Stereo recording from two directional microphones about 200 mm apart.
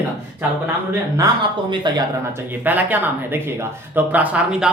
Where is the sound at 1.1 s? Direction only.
20° right (ahead or behind).